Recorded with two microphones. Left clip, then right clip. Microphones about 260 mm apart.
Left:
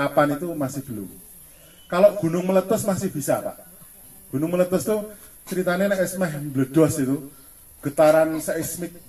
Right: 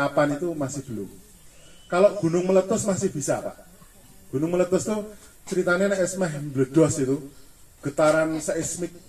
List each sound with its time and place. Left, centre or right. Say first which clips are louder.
0.0 s a man's voice: left 2 dB; left
1.9 s a man's voice: left 2 dB; left